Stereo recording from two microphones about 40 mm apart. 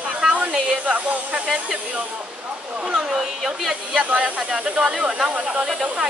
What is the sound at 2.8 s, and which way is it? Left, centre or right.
Speech, centre.